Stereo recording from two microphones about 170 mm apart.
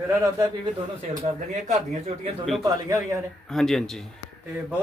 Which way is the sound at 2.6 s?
20° right (ahead or behind).